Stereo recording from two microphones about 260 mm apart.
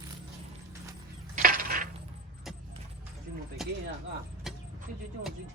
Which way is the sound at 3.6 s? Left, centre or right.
Centre.